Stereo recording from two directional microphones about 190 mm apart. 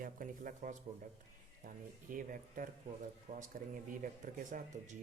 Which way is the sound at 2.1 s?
45° right (ahead or behind).